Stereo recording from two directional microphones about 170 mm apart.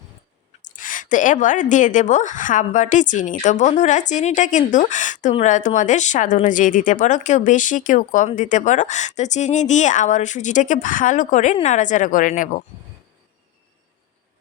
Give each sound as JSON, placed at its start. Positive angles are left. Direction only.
{"t": 0.6, "sound": "speech", "side_deg": 50}